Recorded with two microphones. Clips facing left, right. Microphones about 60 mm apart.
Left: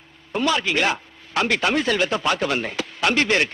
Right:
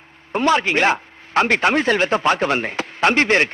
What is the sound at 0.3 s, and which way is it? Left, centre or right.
A man's voice, right.